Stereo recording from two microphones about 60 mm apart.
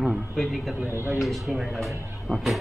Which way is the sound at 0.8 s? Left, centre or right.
Right.